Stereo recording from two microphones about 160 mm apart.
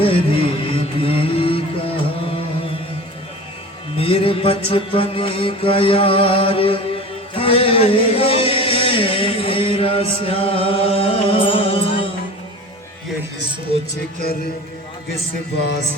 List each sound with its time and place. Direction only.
0.1 s music: 35° left (ahead or behind)
3.9 s music: 35° left (ahead or behind)